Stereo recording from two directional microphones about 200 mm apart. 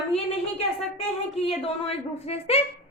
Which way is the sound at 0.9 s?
30° left (ahead or behind).